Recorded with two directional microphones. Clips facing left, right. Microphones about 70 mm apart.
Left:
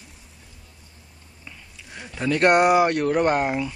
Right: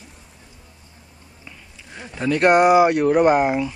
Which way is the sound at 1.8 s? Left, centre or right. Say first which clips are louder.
Right 2 dB; centre.